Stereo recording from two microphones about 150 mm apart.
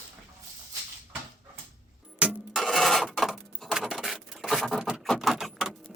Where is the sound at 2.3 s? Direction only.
5° left (ahead or behind).